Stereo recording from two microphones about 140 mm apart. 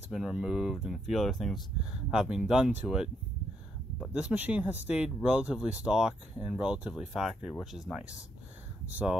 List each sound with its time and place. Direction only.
0.1 s speech: 5° right (ahead or behind)
4.1 s speech: 10° right (ahead or behind)